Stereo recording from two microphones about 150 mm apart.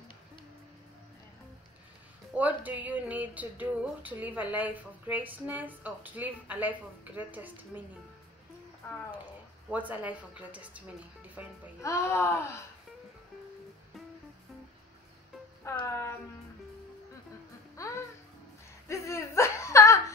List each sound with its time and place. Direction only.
2.3 s a sound: 10° right (ahead or behind)
9.1 s speech: 10° right (ahead or behind)
11.4 s a sound: 10° right (ahead or behind)
11.8 s speech: 20° left (ahead or behind)
15.6 s music: 20° left (ahead or behind)
17.7 s speech: 20° left (ahead or behind)